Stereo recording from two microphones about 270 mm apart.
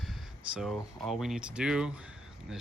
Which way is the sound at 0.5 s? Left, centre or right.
Centre.